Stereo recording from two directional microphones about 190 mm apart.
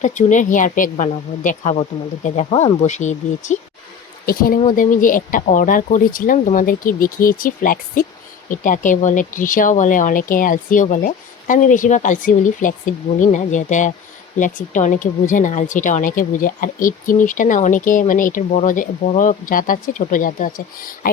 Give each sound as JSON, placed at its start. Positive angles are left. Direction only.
{"t": 0.0, "sound": "a woman's voice", "side_deg": 40}